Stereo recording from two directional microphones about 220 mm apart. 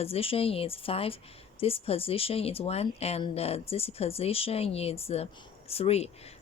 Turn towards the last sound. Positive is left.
turn(degrees=30)  # may be behind; listen again after turning